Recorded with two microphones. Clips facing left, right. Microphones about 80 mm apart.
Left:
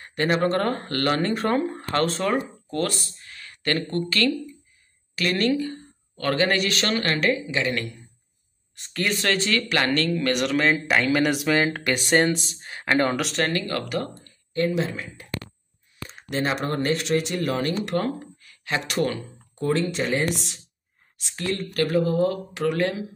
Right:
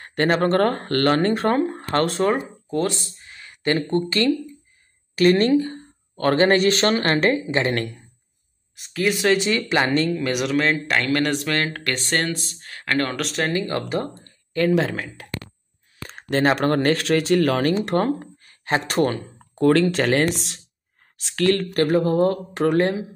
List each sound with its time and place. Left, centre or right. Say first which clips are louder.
0.0 s speech: right 3 dB; right
2.3 s speech: right 1 dB; centre
5.1 s speech: right 7 dB; right
8.7 s speech: right 4 dB; centre
13.1 s speech: even; centre
13.5 s speech: right 3 dB; right
14.5 s speech: right 4 dB; right
16.2 s speech: right 6 dB; right
17.7 s speech: right 5 dB; right
19.6 s speech: right 7 dB; right
21.2 s speech: right 9 dB; right
21.7 s speech: right 3 dB; right